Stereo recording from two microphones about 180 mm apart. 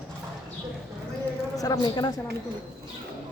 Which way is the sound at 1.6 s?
20° left (ahead or behind).